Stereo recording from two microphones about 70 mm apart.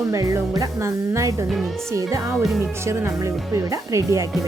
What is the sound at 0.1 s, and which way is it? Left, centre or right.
Speech, right.